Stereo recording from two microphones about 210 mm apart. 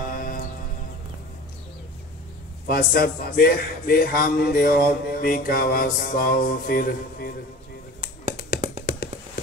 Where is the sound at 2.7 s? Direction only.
45° left (ahead or behind).